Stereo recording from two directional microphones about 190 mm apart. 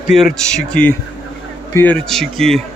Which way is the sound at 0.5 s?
5° left (ahead or behind).